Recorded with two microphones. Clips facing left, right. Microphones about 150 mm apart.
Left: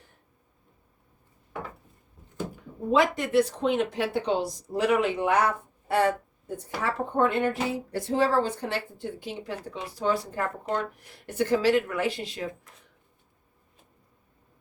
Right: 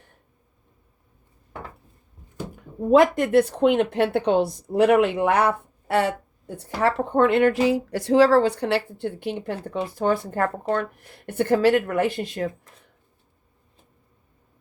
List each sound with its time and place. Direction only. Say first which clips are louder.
2.9 s a woman's voice: right 6 dB; 50° right (ahead or behind)
6.6 s speech: right 8 dB; 75° right (ahead or behind); by 12.5 s 50° right (ahead or behind)